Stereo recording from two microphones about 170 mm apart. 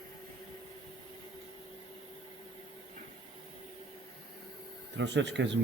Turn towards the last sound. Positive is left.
turn(degrees=-90)